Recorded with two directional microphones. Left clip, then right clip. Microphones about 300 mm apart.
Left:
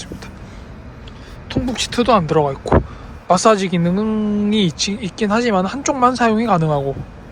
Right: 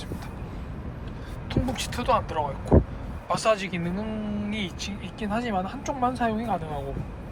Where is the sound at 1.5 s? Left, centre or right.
Centre.